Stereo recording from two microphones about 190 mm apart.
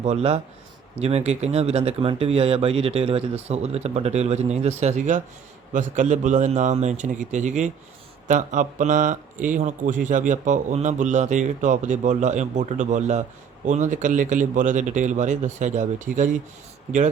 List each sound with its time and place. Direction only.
0.0 s speech: 35° right (ahead or behind)